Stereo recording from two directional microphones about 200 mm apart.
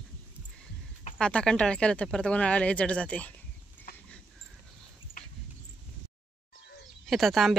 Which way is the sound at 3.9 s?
50° left (ahead or behind).